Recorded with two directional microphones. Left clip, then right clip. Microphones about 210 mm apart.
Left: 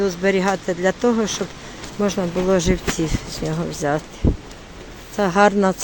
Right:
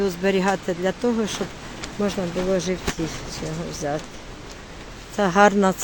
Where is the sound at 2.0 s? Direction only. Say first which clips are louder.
Left 4 dB; 20° left (ahead or behind).